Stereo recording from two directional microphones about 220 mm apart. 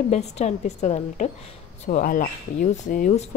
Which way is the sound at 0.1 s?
30° left (ahead or behind).